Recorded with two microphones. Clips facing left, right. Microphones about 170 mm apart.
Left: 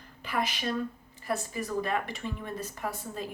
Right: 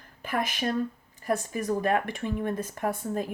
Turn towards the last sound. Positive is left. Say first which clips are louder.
# right 7 dB
turn(degrees=-50)  # may be behind; listen again after turning